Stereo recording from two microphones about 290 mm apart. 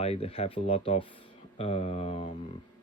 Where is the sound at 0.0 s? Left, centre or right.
Left.